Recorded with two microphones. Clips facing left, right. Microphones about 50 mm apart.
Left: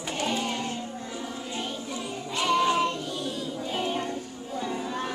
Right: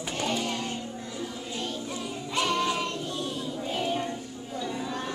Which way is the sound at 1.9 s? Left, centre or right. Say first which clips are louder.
Right 1 dB; centre.